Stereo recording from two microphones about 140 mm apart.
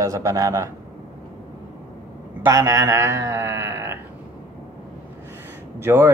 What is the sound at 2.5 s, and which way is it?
Speech, 20° right (ahead or behind).